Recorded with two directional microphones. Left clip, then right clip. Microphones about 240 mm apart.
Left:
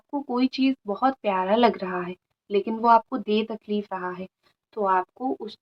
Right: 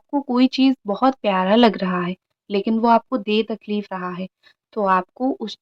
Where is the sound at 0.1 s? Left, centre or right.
Right.